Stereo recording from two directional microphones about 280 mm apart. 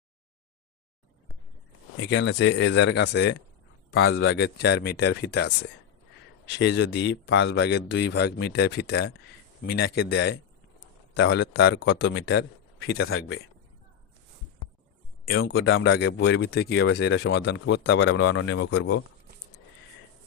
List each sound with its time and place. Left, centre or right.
2.0 s a man's voice: left
6.5 s speech: left
15.4 s speech: left